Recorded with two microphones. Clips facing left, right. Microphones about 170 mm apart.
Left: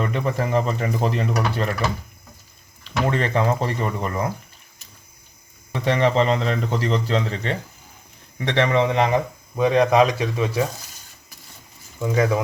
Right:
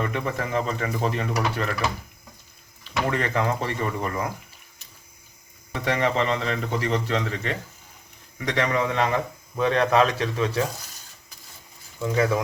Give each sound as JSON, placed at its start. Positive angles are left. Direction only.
{"t": 0.0, "sound": "speech", "side_deg": 35}
{"t": 3.1, "sound": "speech", "side_deg": 30}
{"t": 5.7, "sound": "speech", "side_deg": 30}
{"t": 11.9, "sound": "speech", "side_deg": 15}